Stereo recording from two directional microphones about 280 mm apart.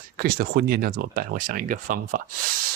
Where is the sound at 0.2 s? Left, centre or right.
Right.